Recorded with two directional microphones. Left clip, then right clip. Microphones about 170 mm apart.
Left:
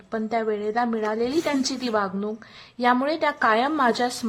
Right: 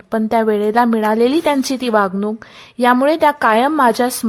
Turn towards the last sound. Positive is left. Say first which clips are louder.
# right 8 dB
turn(degrees=-40)  # may be behind; listen again after turning